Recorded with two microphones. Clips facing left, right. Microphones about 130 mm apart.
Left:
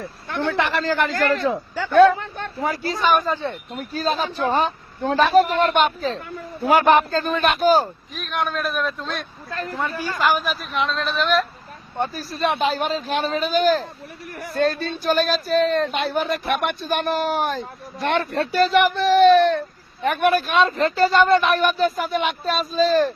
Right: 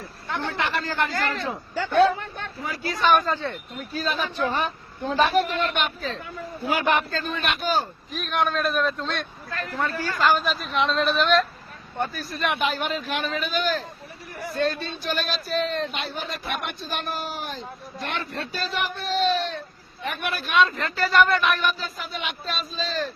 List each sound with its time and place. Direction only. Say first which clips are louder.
0.3 s speech: left 5 dB; 70° left (ahead or behind); by 1.1 s 90° left
1.9 s a man's voice: left 6 dB; 55° left (ahead or behind)
2.6 s speech: left 6 dB; 40° left (ahead or behind)
3.0 s a man's voice: even; centre (ahead or behind)
3.2 s a man's voice: left 3 dB; 15° left (ahead or behind)
3.8 s speech: left 5 dB; 35° left (ahead or behind)
5.1 s speech: left 5 dB; 40° left (ahead or behind)
8.1 s a man's voice: right 1 dB; centre (ahead or behind)
9.7 s a man's voice: even; 15° left (ahead or behind)
12.1 s speech: left 4 dB; 35° left (ahead or behind)
14.3 s a sound: left 2 dB; 55° left (ahead or behind)
14.6 s speech: left 5 dB; 40° left (ahead or behind)
21.6 s speech: left 8 dB; 50° left (ahead or behind)